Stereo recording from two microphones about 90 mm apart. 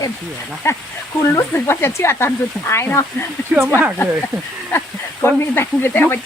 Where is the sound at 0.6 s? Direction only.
30° left (ahead or behind).